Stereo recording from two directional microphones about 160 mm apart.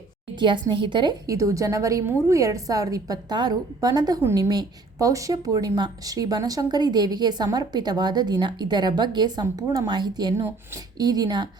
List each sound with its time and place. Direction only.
0.3 s a woman's voice: 30° right (ahead or behind)